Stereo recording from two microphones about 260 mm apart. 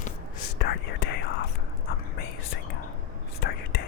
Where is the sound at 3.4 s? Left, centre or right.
Left.